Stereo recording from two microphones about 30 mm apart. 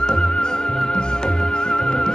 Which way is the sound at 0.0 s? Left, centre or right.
Left.